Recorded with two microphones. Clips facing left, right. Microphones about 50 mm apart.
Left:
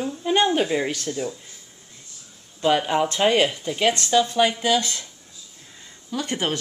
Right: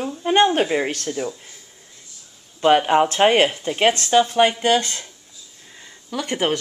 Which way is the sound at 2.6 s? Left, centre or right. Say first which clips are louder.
Right 5 dB; right.